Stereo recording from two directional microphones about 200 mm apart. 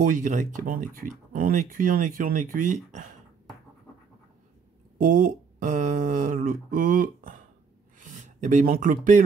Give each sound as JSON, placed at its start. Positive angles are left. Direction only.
{"t": 0.0, "sound": "speech", "side_deg": -40}
{"t": 4.9, "sound": "speech", "side_deg": -40}